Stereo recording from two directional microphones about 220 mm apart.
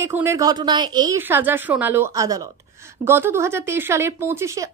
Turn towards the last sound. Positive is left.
turn(degrees=-10)  # may be behind; listen again after turning